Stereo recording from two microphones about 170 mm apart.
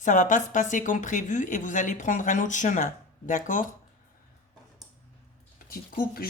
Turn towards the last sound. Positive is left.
turn(degrees=60)  # may be behind; listen again after turning